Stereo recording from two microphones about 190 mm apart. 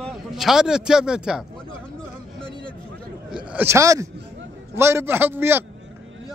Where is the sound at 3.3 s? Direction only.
10° right (ahead or behind).